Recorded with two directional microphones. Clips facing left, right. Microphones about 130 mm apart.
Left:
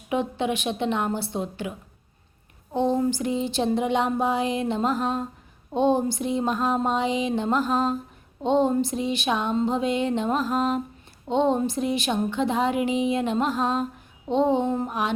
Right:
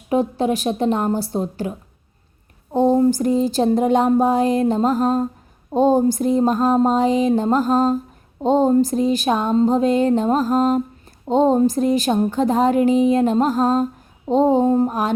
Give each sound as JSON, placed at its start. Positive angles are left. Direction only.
{"t": 0.1, "sound": "a woman's voice", "side_deg": -40}
{"t": 2.7, "sound": "a woman's voice", "side_deg": -40}